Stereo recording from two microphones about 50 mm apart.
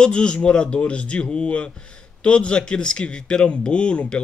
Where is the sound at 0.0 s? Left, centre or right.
Centre.